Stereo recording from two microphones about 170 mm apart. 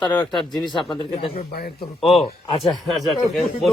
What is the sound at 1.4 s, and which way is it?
Speech, 65° left (ahead or behind).